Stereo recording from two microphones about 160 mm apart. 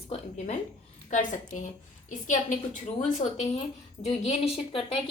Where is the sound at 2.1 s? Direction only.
55° left (ahead or behind).